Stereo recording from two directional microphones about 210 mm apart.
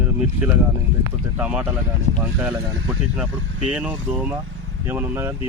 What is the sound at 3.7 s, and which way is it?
Speech, 5° right (ahead or behind).